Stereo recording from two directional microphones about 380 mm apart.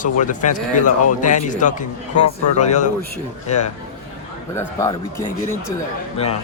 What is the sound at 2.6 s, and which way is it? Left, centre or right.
Speech, centre.